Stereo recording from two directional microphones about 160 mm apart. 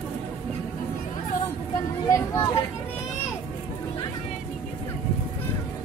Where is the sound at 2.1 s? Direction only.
20° left (ahead or behind).